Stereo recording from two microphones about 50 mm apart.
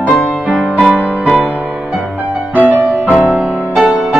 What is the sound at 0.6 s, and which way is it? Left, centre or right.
Music, centre.